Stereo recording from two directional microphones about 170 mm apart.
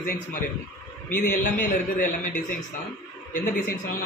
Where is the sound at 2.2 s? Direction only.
50° left (ahead or behind).